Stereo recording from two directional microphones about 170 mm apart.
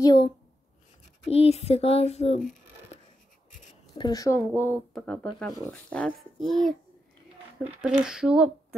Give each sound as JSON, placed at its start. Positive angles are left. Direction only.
{"t": 0.0, "sound": "speech", "side_deg": 25}
{"t": 1.3, "sound": "a sound", "side_deg": 35}
{"t": 4.0, "sound": "speech", "side_deg": 20}
{"t": 4.6, "sound": "a child's voice", "side_deg": 10}